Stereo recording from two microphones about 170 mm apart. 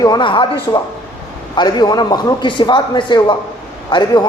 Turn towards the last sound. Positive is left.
turn(degrees=25)  # may be behind; listen again after turning